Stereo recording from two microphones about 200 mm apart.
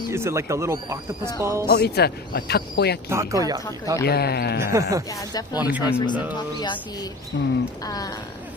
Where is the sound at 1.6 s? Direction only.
50° left (ahead or behind).